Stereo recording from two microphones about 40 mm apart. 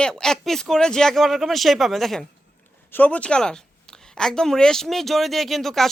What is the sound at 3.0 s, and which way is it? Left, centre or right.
Speech, left.